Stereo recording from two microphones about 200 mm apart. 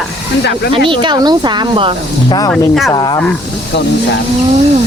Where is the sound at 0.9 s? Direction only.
25° right (ahead or behind).